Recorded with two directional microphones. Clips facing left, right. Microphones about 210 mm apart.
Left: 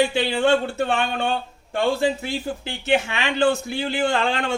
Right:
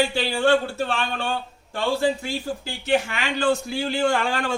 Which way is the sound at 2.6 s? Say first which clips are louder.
Left 1 dB; 25° left (ahead or behind).